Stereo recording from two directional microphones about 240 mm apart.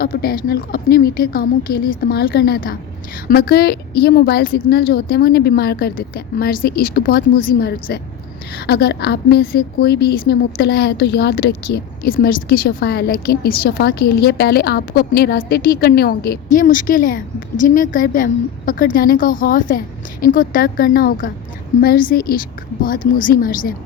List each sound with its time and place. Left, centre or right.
0.0 s a woman's voice: left